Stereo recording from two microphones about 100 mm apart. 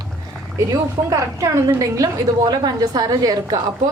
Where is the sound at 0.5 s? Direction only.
35° right (ahead or behind).